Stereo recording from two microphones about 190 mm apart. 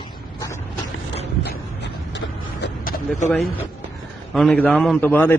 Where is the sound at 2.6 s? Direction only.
50° left (ahead or behind).